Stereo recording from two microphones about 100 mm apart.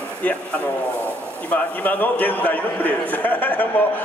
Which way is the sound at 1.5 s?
15° left (ahead or behind).